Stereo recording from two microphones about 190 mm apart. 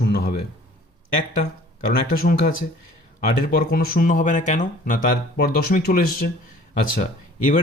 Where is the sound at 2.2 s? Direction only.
50° left (ahead or behind).